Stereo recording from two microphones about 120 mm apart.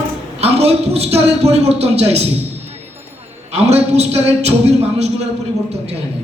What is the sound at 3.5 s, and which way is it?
A man's voice, 60° right (ahead or behind).